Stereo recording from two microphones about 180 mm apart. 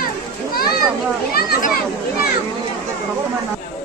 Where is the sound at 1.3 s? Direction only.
60° left (ahead or behind).